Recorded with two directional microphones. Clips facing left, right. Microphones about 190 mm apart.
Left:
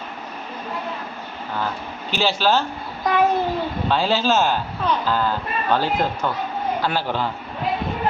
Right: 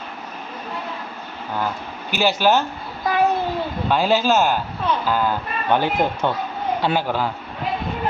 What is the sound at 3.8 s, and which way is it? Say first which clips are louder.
A man's voice: right 2 dB; 15° right (ahead or behind).